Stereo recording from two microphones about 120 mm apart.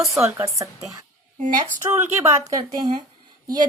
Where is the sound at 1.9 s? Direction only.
25° right (ahead or behind).